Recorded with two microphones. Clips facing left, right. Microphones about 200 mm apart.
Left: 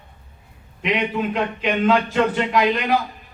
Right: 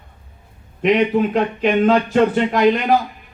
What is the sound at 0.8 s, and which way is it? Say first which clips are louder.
Speech: right 7 dB; 45° right (ahead or behind).